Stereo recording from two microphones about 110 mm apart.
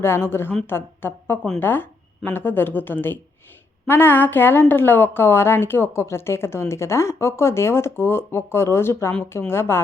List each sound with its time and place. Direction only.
0.0 s a woman's voice: 20° left (ahead or behind)